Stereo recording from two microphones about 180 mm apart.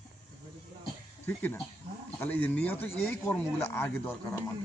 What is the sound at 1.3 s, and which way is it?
Speech, 10° left (ahead or behind).